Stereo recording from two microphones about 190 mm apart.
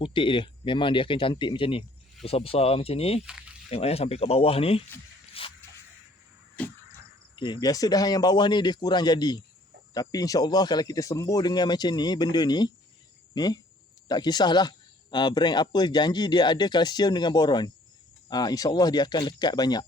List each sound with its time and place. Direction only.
0.0 s speech: 25° left (ahead or behind)
5.3 s a sound: 30° left (ahead or behind)
7.3 s speech: 25° left (ahead or behind)